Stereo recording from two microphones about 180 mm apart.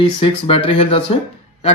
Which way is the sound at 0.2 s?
30° left (ahead or behind).